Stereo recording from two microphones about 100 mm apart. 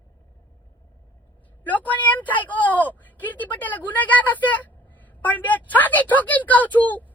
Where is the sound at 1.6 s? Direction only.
15° left (ahead or behind).